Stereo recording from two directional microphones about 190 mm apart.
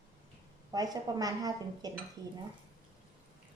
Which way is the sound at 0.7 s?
20° right (ahead or behind).